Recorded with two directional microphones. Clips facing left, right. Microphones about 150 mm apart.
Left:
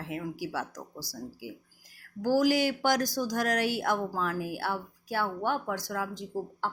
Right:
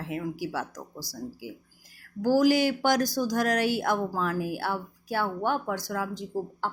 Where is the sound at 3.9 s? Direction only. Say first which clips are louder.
Right 2 dB; 50° right (ahead or behind).